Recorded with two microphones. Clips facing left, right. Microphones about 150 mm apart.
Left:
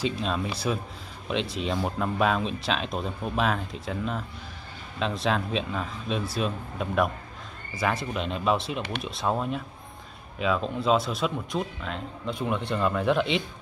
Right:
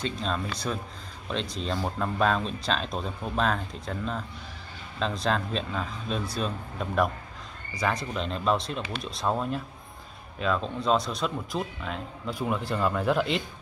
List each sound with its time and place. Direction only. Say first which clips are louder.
0.0 s speech: left 2 dB; 10° left (ahead or behind)